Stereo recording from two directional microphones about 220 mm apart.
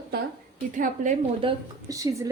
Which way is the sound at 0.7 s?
35° right (ahead or behind).